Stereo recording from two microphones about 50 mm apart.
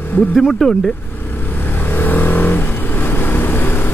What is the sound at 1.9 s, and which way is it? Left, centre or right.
Vehicle, left.